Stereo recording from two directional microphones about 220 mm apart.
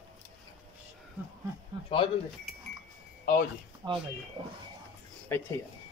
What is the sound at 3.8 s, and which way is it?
Speech, 20° right (ahead or behind).